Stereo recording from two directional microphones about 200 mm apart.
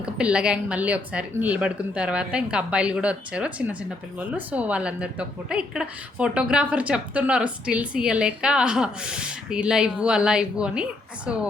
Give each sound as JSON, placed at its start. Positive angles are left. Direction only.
{"t": 0.0, "sound": "a woman's voice", "side_deg": -5}